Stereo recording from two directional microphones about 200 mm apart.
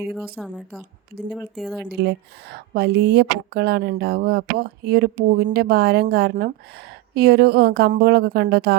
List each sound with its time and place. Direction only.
0.0 s speech: centre (ahead or behind)
2.0 s speech: 55° right (ahead or behind)